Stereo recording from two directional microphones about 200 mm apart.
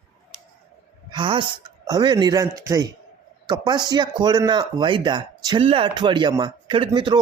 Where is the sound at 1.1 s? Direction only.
25° right (ahead or behind).